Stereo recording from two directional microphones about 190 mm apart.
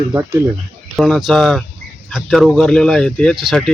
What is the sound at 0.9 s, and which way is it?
A man's voice, centre (ahead or behind).